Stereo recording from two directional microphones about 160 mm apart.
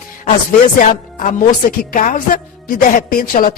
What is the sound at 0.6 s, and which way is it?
Speech, 55° left (ahead or behind).